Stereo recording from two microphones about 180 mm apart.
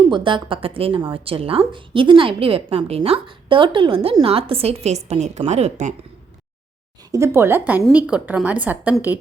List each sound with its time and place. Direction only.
0.1 s a woman's voice: 25° right (ahead or behind)
7.1 s a woman's voice: 15° right (ahead or behind)